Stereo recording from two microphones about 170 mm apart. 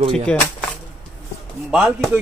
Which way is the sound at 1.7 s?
5° right (ahead or behind).